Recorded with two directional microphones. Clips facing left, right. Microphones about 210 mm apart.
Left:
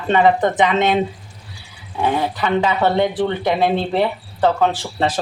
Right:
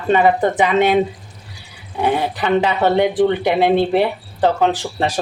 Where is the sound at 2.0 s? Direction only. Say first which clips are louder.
Right 1 dB; 15° right (ahead or behind).